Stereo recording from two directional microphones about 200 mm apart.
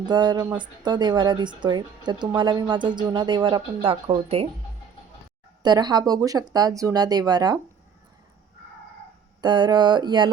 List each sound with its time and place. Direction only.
0.1 s speech: 20° right (ahead or behind)
5.6 s speech: 20° right (ahead or behind)
9.4 s speech: 20° right (ahead or behind)